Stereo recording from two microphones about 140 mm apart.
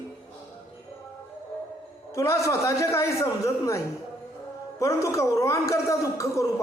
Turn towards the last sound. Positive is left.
turn(degrees=20)  # may be behind; listen again after turning